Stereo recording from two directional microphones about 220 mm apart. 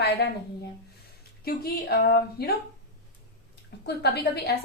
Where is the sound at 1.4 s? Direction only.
45° left (ahead or behind).